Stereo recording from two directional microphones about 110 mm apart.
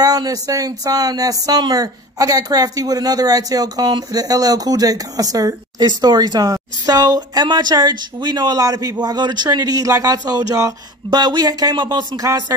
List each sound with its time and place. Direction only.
0.0 s speech: 35° right (ahead or behind)